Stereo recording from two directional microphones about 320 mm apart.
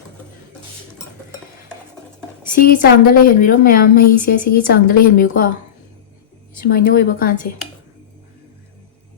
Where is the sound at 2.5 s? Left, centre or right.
Left.